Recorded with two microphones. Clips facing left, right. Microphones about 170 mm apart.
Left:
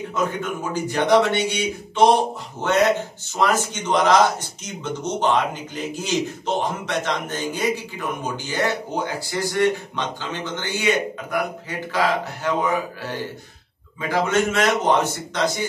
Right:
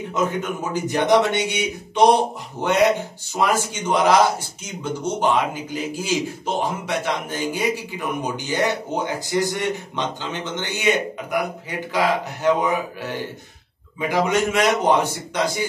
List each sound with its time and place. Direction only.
0.1 s speech: 20° right (ahead or behind)
13.9 s speech: 15° right (ahead or behind)